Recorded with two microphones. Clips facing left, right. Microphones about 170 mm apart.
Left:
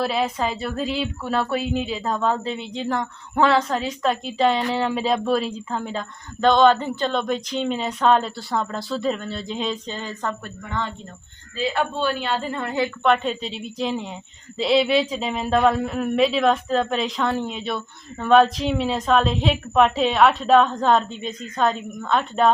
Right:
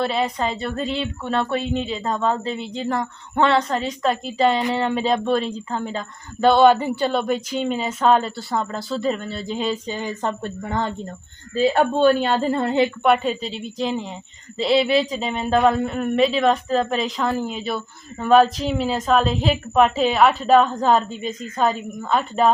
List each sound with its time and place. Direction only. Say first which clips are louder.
0.0 s speech: right 1 dB; centre (ahead or behind); by 10.3 s 15° right (ahead or behind)
10.4 s a woman's voice: right 5 dB; 40° right (ahead or behind)
13.0 s speech: right 2 dB; 5° right (ahead or behind)